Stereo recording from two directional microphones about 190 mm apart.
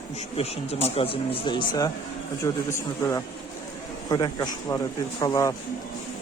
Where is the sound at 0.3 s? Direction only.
30° left (ahead or behind).